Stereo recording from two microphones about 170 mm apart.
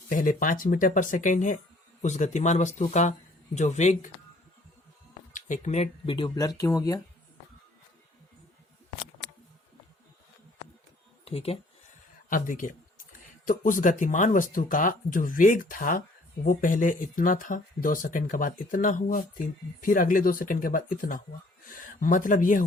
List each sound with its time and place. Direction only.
0.1 s speech: 50° left (ahead or behind)
5.3 s speech: 45° left (ahead or behind)
6.1 s speech: 25° left (ahead or behind)
11.3 s speech: 35° left (ahead or behind)
12.3 s speech: 50° left (ahead or behind)